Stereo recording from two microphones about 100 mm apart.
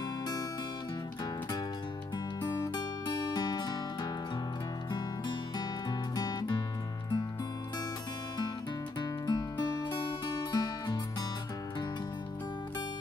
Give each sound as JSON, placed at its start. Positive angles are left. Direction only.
{"t": 2.4, "sound": "music", "side_deg": 40}
{"t": 5.9, "sound": "music", "side_deg": 40}
{"t": 9.0, "sound": "music", "side_deg": 45}